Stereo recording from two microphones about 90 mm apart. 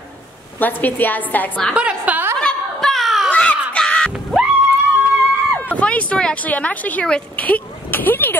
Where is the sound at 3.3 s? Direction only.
15° left (ahead or behind).